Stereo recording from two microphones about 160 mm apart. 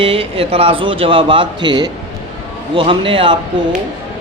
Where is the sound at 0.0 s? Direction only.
35° right (ahead or behind).